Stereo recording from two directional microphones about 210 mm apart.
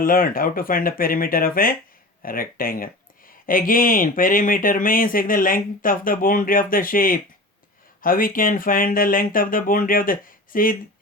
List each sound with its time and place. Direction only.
0.0 s speech: 45° left (ahead or behind)